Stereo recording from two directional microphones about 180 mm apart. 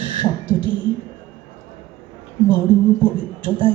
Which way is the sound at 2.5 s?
25° left (ahead or behind).